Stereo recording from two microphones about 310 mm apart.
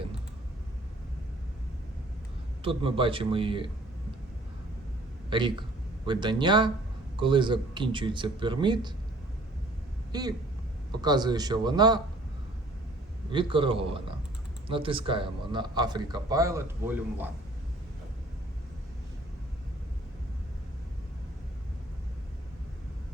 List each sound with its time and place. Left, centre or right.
2.6 s a man's voice: centre
5.3 s a man's voice: centre
10.1 s a man's voice: centre
13.3 s a man's voice: centre